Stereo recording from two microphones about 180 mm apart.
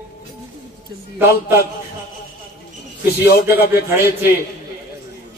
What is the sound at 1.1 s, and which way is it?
Speech, 15° right (ahead or behind).